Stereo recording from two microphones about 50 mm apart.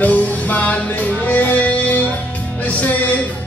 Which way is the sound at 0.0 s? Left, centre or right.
Left.